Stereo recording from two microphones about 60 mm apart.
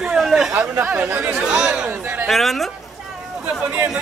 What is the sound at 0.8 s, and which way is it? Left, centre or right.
A man's voice, centre.